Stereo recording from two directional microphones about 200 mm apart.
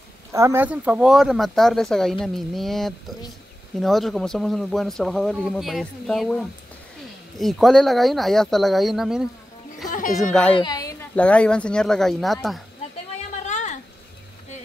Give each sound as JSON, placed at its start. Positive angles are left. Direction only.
{"t": 0.3, "sound": "speech", "side_deg": -15}
{"t": 9.8, "sound": "music", "side_deg": 45}
{"t": 10.3, "sound": "a child's voice", "side_deg": 5}
{"t": 10.6, "sound": "speech", "side_deg": 20}
{"t": 13.5, "sound": "a sound", "side_deg": 35}